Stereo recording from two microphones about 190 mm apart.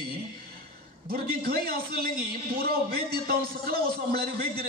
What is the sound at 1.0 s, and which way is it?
A man's voice, 50° right (ahead or behind).